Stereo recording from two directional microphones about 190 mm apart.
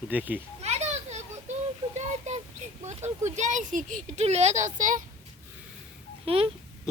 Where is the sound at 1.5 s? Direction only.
35° right (ahead or behind).